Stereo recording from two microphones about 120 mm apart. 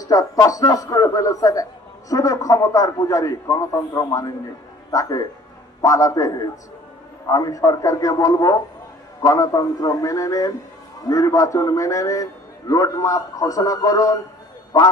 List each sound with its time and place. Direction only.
0.0 s a man's voice: 30° left (ahead or behind)